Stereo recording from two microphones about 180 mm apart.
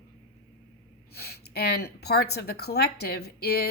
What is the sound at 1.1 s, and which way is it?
Speech, 60° left (ahead or behind).